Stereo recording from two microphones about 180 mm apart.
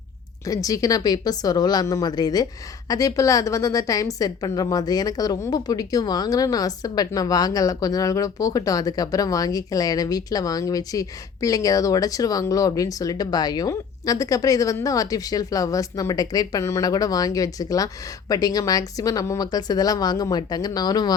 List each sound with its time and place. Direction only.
0.4 s a woman's voice: 20° left (ahead or behind)